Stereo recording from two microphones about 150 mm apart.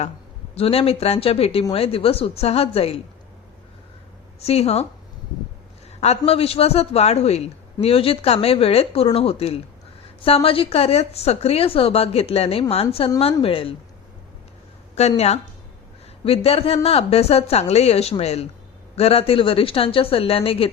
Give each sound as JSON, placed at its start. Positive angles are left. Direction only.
{"t": 0.5, "sound": "a man's voice", "side_deg": 40}
{"t": 4.4, "sound": "a woman's voice", "side_deg": 45}
{"t": 6.0, "sound": "a man's voice", "side_deg": 40}
{"t": 14.9, "sound": "a woman's voice", "side_deg": 45}